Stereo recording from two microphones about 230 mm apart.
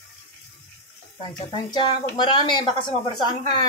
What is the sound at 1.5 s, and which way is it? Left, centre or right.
A woman's voice, centre.